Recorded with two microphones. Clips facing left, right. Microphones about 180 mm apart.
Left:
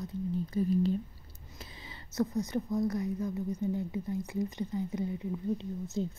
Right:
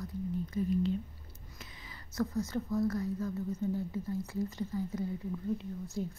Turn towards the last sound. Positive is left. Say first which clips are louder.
# left 3 dB
turn(degrees=25)  # may be behind; listen again after turning